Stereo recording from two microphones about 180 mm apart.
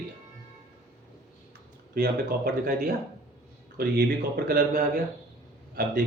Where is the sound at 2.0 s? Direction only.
55° right (ahead or behind).